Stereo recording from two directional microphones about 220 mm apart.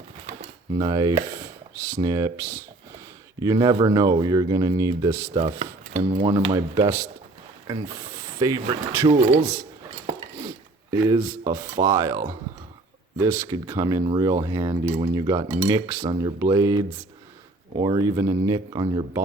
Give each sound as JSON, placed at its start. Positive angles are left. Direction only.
{"t": 0.7, "sound": "speech", "side_deg": -20}
{"t": 9.4, "sound": "speech", "side_deg": -10}
{"t": 11.1, "sound": "speech", "side_deg": -15}
{"t": 17.7, "sound": "speech", "side_deg": -20}